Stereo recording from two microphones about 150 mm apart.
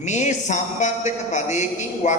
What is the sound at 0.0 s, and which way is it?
A man's voice, 50° left (ahead or behind).